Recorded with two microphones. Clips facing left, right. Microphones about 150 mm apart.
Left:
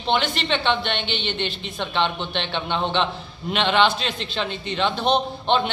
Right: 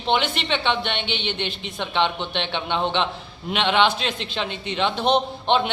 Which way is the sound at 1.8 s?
15° right (ahead or behind).